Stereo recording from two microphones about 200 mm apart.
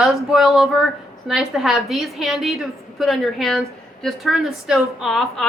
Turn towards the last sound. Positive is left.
turn(degrees=0)  # may be behind; listen again after turning